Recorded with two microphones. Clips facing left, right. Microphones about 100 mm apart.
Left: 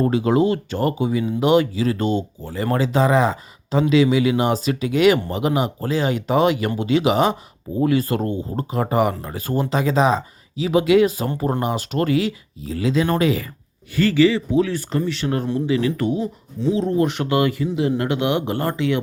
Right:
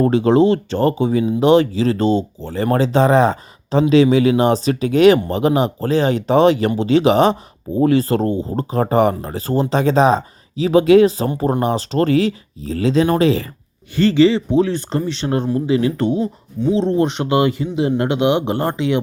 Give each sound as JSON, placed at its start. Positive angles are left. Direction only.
{"t": 0.1, "sound": "speech", "side_deg": -30}